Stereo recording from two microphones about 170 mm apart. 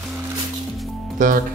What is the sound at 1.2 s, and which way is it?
Speech, 50° right (ahead or behind).